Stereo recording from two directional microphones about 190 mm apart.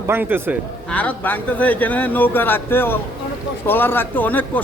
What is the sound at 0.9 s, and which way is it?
Speech, 10° left (ahead or behind).